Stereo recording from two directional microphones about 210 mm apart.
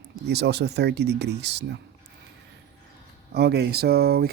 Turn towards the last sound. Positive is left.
turn(degrees=-50)  # may be behind; listen again after turning